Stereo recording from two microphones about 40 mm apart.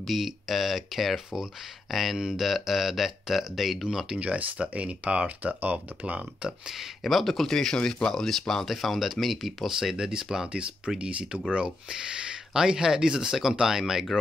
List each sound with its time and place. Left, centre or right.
0.0 s speech: centre
4.2 s speech: right
5.6 s speech: right
6.1 s speech: right
7.0 s speech: centre
9.8 s speech: centre
11.0 s speech: right; by 14.0 s centre